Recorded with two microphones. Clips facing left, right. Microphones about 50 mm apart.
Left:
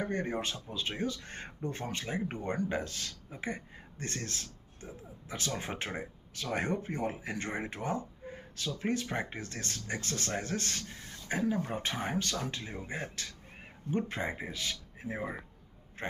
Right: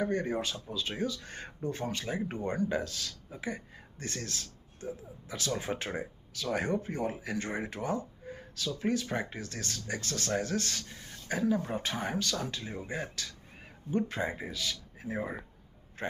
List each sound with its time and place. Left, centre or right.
0.0 s speech: left
5.5 s a man's voice: left